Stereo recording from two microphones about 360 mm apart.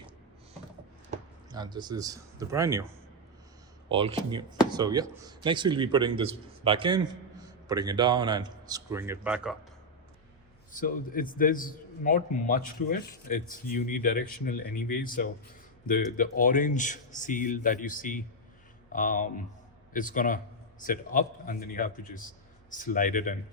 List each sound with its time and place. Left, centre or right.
1.1 s speech: centre
10.7 s a man's voice: left